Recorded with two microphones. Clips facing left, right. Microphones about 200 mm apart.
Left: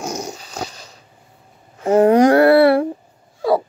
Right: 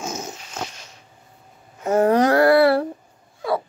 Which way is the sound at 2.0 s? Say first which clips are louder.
Left 5 dB; 15° left (ahead or behind).